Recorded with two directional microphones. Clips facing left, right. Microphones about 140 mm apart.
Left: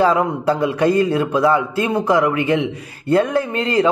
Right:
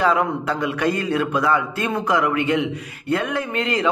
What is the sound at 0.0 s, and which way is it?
A man's voice, 30° left (ahead or behind).